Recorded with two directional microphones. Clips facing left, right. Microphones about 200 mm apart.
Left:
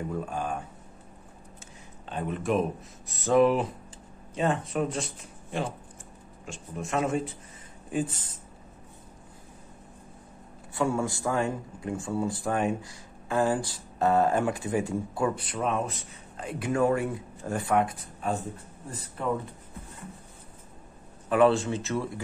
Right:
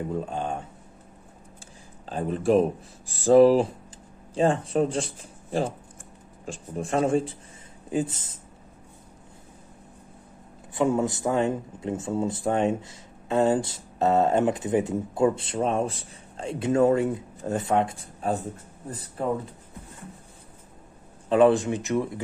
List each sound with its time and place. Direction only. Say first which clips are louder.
0.1 s speech: right 2 dB; 25° right (ahead or behind)
2.0 s speech: right 5 dB; 35° right (ahead or behind)
10.7 s speech: right 4 dB; 20° right (ahead or behind)
21.3 s speech: right 3 dB; 20° right (ahead or behind)